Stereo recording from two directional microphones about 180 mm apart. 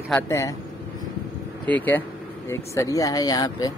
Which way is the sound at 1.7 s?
10° left (ahead or behind).